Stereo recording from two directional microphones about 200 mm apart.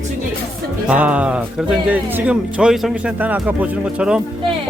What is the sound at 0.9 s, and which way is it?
Speech, 5° right (ahead or behind).